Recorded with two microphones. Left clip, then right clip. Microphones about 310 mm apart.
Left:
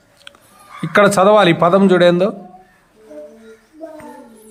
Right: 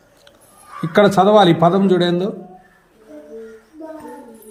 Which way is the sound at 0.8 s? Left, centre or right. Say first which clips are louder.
Left 2 dB; left.